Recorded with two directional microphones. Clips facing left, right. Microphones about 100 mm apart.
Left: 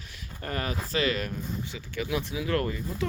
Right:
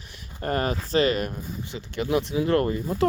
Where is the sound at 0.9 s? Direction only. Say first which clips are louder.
Right 6 dB; 25° right (ahead or behind).